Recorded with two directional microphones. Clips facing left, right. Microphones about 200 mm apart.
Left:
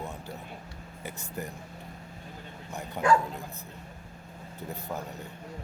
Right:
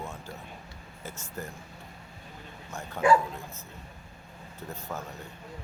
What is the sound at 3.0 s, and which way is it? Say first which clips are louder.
Speech: right 2 dB; 15° left (ahead or behind).